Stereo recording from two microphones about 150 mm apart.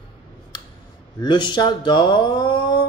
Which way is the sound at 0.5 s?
30° left (ahead or behind).